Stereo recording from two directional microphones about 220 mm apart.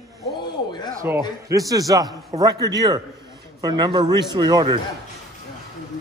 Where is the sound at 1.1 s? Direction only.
10° right (ahead or behind).